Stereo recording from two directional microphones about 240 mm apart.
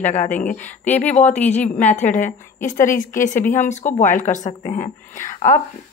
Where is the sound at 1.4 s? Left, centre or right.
Left.